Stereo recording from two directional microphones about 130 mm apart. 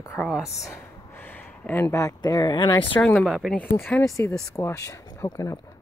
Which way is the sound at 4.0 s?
25° left (ahead or behind).